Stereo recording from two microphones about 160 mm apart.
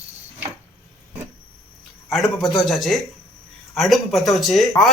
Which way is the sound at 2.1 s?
Centre (ahead or behind).